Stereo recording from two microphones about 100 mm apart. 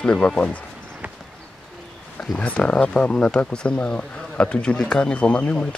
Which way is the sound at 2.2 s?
10° left (ahead or behind).